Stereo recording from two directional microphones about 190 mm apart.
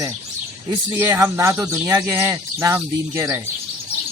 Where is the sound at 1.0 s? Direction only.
15° right (ahead or behind).